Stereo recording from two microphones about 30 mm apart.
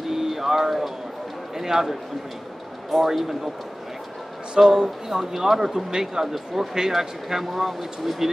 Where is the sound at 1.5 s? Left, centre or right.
Centre.